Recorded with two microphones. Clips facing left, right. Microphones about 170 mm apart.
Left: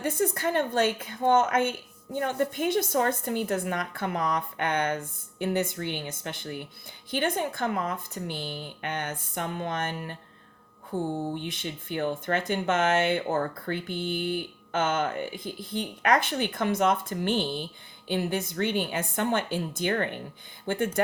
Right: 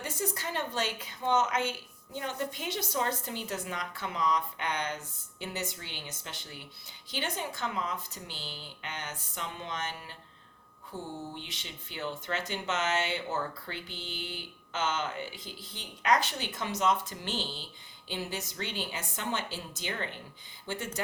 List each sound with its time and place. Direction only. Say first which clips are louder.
0.0 s a woman's voice: left 9 dB; 55° left (ahead or behind)